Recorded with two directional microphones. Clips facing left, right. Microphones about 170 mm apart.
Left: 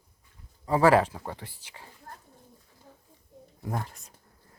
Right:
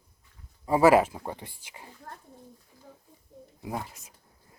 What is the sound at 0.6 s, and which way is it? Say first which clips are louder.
Speech: right 1 dB; 10° right (ahead or behind).